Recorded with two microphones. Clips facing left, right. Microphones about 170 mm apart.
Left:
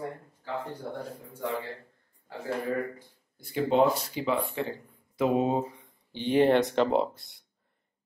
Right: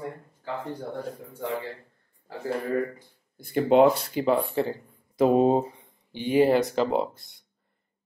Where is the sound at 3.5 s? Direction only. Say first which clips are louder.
Right 5 dB; 60° right (ahead or behind).